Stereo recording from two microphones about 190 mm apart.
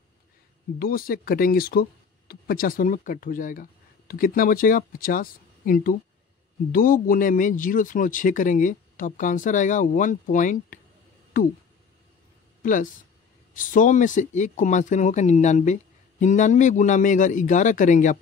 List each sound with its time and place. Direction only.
0.7 s speech: 50° left (ahead or behind)
12.6 s speech: 45° left (ahead or behind)